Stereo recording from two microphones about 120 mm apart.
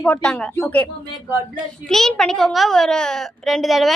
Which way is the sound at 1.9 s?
5° left (ahead or behind).